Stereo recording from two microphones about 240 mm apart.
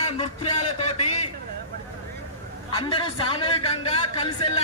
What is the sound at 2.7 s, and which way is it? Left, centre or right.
Speech, left.